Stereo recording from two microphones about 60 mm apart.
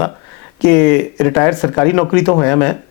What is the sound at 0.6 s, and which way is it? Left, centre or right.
Speech, centre.